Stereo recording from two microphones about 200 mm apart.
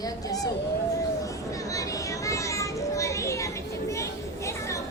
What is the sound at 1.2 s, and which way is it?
Children playing, 15° left (ahead or behind).